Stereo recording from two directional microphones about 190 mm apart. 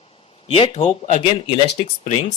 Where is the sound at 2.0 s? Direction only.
40° left (ahead or behind).